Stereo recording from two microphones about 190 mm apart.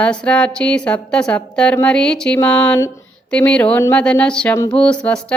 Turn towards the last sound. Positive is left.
turn(degrees=5)  # may be behind; listen again after turning